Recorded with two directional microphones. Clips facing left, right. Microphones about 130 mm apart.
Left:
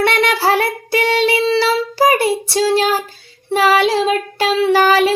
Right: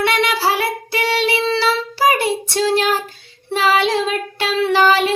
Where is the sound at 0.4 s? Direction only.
50° left (ahead or behind).